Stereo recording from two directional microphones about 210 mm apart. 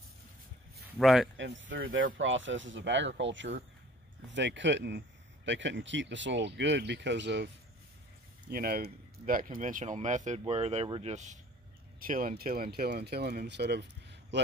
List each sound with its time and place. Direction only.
0.9 s speech: centre (ahead or behind)
1.3 s speech: 60° right (ahead or behind)